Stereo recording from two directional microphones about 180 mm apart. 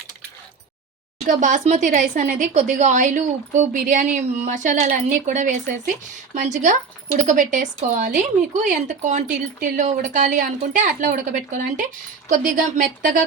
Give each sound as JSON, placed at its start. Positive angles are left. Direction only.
{"t": 1.3, "sound": "speech", "side_deg": -45}